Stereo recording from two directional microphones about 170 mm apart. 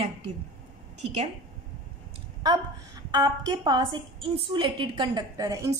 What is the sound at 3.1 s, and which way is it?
Speech, 25° right (ahead or behind).